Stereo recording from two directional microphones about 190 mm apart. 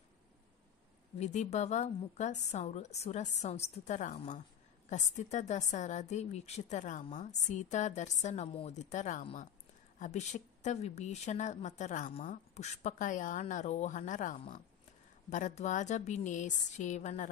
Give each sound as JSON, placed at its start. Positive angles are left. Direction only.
{"t": 1.2, "sound": "a woman's voice", "side_deg": 40}